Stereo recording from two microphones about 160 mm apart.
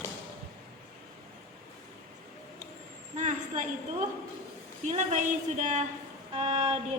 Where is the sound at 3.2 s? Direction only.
50° right (ahead or behind).